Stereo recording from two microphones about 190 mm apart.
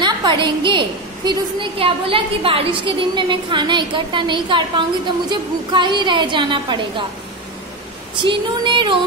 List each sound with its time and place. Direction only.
0.0 s a woman's voice: 25° right (ahead or behind)
8.2 s a woman's voice: 25° right (ahead or behind)